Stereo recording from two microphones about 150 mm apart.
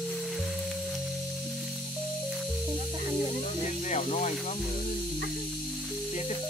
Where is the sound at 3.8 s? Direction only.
50° left (ahead or behind).